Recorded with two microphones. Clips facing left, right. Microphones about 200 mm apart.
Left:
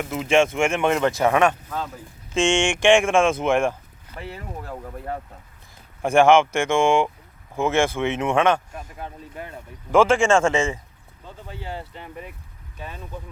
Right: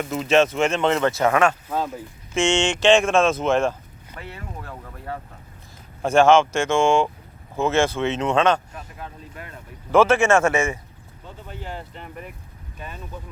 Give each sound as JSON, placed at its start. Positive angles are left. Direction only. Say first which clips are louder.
{"t": 0.0, "sound": "speech", "louder": "right 1 dB", "side_deg": 10}
{"t": 6.0, "sound": "speech", "louder": "even", "side_deg": 15}
{"t": 9.9, "sound": "speech", "louder": "even", "side_deg": 10}